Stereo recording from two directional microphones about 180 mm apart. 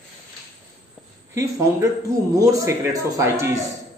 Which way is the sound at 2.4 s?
20° right (ahead or behind).